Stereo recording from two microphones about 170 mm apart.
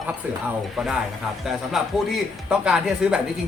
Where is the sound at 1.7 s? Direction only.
5° right (ahead or behind).